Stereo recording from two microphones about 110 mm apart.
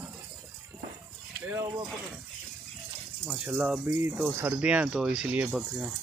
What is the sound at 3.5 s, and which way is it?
Speech, 10° right (ahead or behind).